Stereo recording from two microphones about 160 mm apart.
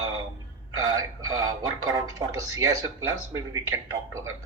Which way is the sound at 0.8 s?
25° right (ahead or behind).